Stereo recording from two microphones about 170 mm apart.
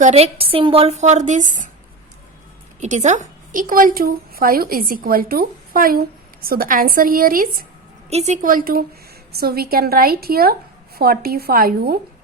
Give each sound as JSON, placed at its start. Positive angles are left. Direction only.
{"t": 0.0, "sound": "a woman's voice", "side_deg": -40}
{"t": 2.8, "sound": "a woman's voice", "side_deg": -45}
{"t": 8.1, "sound": "a woman's voice", "side_deg": -40}